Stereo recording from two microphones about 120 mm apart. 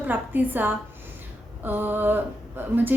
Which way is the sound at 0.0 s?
15° right (ahead or behind).